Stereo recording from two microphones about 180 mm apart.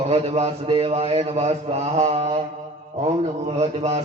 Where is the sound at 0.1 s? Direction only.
35° right (ahead or behind).